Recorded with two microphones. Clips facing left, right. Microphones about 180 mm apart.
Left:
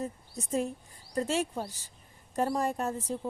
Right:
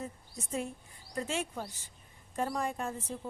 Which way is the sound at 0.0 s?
40° left (ahead or behind).